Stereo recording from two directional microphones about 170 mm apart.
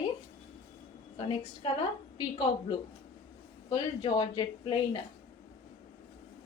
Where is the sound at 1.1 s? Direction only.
35° left (ahead or behind).